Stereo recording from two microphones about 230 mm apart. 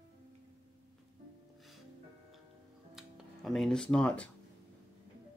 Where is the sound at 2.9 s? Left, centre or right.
Centre.